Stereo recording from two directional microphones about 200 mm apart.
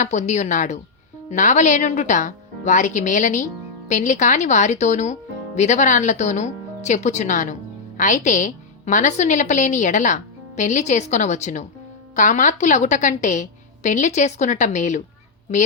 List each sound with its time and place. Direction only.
0.0 s a woman's voice: 35° left (ahead or behind)